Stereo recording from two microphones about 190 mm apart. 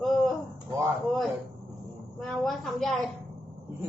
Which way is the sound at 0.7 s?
20° right (ahead or behind).